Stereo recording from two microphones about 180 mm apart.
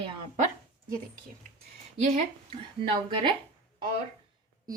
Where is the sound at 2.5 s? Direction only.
30° right (ahead or behind).